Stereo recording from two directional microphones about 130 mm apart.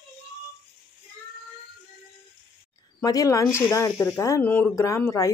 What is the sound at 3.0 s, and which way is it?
Speech, 25° left (ahead or behind).